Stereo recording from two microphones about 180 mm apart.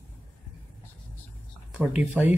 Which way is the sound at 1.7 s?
10° right (ahead or behind).